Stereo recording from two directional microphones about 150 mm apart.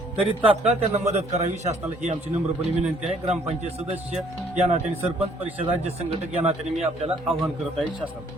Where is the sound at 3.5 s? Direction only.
45° right (ahead or behind).